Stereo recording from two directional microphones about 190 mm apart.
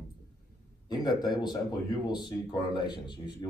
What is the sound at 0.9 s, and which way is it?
Speech, 20° left (ahead or behind).